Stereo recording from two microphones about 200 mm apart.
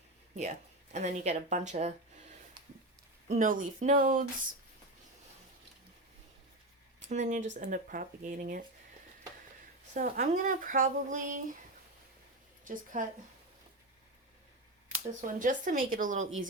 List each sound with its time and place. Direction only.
0.4 s speech: 35° right (ahead or behind)
3.2 s speech: 40° right (ahead or behind)
7.0 s speech: 35° right (ahead or behind)
9.9 s speech: 40° right (ahead or behind)
12.6 s speech: 40° right (ahead or behind)
15.2 s speech: 40° right (ahead or behind)